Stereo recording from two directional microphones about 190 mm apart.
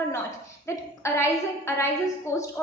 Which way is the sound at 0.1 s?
15° left (ahead or behind).